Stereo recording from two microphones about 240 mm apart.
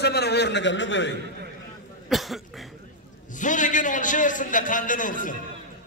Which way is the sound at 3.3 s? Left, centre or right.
Left.